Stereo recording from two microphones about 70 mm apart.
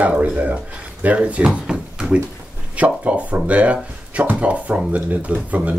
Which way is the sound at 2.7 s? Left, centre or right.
Centre.